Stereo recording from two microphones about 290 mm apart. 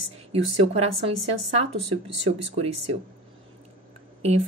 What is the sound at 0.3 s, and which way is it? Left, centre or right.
Speech, right.